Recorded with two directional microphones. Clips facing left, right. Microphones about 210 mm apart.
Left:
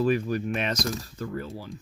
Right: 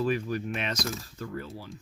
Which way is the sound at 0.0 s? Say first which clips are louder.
Left 4 dB; 40° left (ahead or behind).